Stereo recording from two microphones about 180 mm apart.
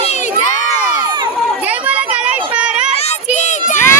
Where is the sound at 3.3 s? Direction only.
40° left (ahead or behind).